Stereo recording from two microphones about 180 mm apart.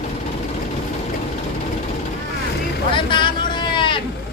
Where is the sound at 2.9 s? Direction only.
25° left (ahead or behind).